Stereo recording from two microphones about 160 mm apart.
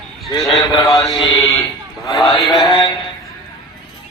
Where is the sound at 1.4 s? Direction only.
20° left (ahead or behind).